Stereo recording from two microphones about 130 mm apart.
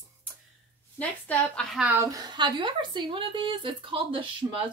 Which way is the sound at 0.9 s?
10° left (ahead or behind).